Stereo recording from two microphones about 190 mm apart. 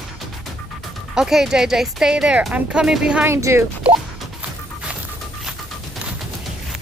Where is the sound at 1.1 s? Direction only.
Centre (ahead or behind).